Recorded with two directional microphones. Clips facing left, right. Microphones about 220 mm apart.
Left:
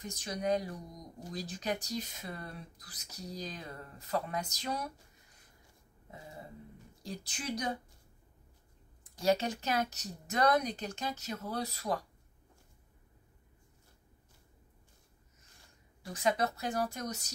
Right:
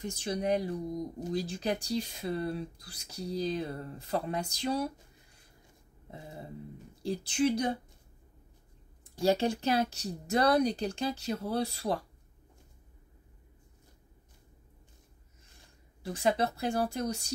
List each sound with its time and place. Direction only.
0.0 s speech: 30° right (ahead or behind)
7.0 s speech: 30° right (ahead or behind)
9.2 s speech: 30° right (ahead or behind)
16.0 s speech: 30° right (ahead or behind)